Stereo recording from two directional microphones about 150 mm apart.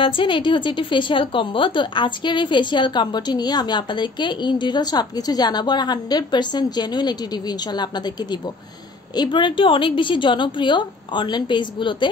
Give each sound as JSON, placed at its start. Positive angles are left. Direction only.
{"t": 0.0, "sound": "a woman's voice", "side_deg": 35}